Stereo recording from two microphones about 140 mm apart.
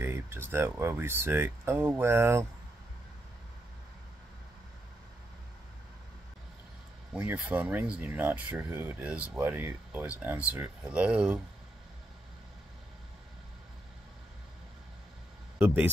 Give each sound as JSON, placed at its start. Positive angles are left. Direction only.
{"t": 0.0, "sound": "speech", "side_deg": -15}
{"t": 7.2, "sound": "speech", "side_deg": -10}
{"t": 15.6, "sound": "speech", "side_deg": -15}